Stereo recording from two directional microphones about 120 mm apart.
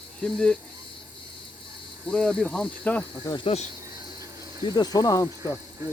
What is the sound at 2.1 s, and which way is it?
Speech, 5° left (ahead or behind).